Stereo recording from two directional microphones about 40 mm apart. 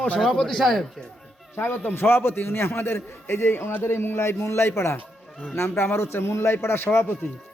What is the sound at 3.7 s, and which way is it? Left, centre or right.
A man's voice, left.